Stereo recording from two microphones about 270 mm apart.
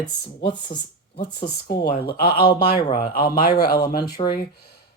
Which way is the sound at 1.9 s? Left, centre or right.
Left.